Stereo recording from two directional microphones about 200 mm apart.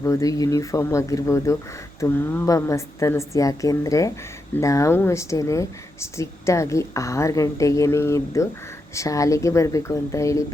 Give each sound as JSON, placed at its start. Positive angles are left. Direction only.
{"t": 0.0, "sound": "speech", "side_deg": 15}